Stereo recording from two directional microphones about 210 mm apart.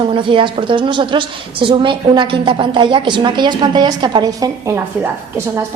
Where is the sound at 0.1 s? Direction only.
25° right (ahead or behind).